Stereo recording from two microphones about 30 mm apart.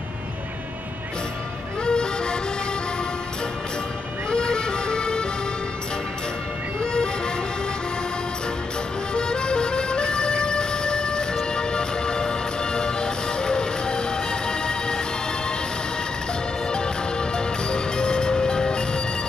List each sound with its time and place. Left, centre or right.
1.9 s music: left
4.3 s music: left
9.1 s music: left
16.7 s music: left